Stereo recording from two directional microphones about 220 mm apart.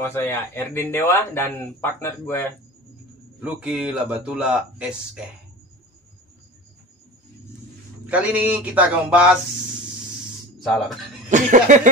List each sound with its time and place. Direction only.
0.0 s speech: 10° left (ahead or behind)
3.4 s speech: 5° right (ahead or behind)
8.1 s speech: 5° right (ahead or behind)
10.6 s speech: centre (ahead or behind)
11.2 s a sound: 35° right (ahead or behind)